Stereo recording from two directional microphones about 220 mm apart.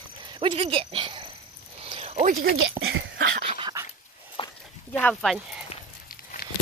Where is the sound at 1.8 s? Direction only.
25° right (ahead or behind).